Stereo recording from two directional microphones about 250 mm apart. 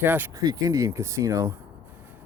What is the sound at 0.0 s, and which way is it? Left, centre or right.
Speech, centre.